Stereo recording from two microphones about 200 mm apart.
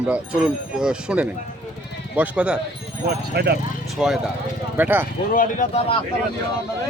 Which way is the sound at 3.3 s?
50° right (ahead or behind).